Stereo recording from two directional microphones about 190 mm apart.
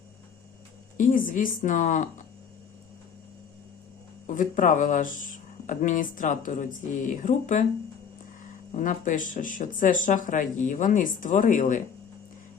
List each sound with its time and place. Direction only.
0.9 s speech: 45° left (ahead or behind)
4.3 s speech: 45° left (ahead or behind)
8.7 s speech: 45° left (ahead or behind)